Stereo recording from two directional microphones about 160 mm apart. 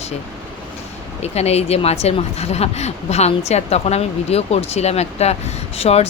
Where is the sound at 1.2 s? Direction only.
40° left (ahead or behind).